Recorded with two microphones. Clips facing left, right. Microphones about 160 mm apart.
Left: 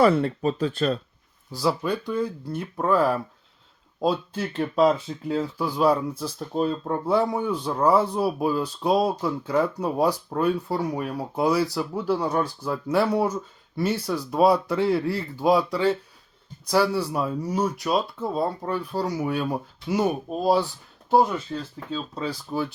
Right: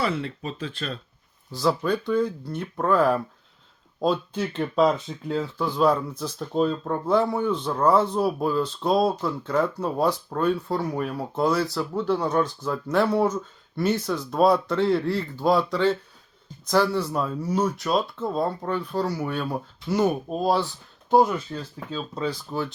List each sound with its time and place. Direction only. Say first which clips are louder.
0.0 s speech: left 8 dB; 45° left (ahead or behind)
1.5 s speech: right 1 dB; 5° left (ahead or behind)
21.9 s speech: right 1 dB; 5° left (ahead or behind)